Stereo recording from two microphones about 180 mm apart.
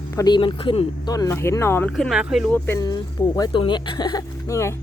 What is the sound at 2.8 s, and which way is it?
Speech, 20° left (ahead or behind).